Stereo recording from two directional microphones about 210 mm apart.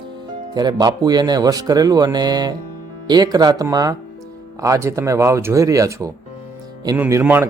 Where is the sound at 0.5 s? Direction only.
20° right (ahead or behind).